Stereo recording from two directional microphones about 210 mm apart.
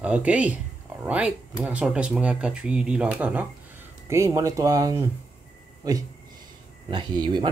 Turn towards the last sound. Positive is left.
turn(degrees=-20)  # may be behind; listen again after turning